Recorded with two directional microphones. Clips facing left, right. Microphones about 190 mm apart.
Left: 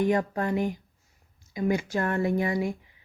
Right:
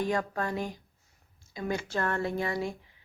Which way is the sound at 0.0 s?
20° left (ahead or behind).